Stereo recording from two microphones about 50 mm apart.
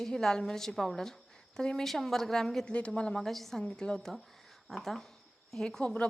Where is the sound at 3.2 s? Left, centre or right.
Centre.